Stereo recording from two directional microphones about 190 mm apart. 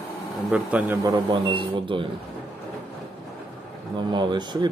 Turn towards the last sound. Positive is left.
turn(degrees=-25)  # may be behind; listen again after turning